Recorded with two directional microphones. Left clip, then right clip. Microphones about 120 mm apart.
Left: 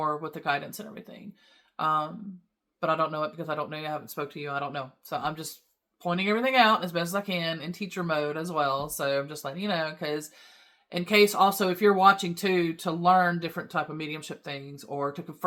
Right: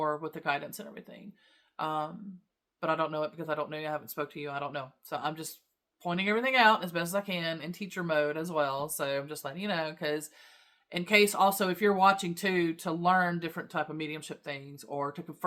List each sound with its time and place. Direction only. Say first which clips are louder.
0.0 s speech: left 2 dB; 30° right (ahead or behind)